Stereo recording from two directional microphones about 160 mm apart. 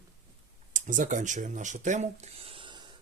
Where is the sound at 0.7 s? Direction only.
50° right (ahead or behind).